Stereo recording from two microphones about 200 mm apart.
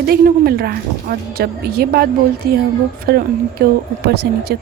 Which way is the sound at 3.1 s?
50° right (ahead or behind).